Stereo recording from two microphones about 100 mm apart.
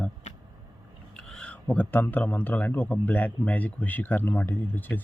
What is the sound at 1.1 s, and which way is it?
A man's voice, 10° left (ahead or behind).